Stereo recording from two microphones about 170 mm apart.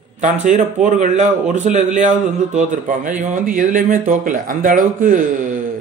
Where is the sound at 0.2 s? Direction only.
45° right (ahead or behind).